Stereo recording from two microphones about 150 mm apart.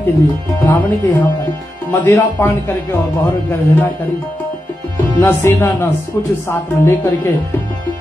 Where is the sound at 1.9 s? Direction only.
15° left (ahead or behind).